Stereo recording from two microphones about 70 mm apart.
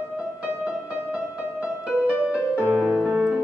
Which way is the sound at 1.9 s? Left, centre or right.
Centre.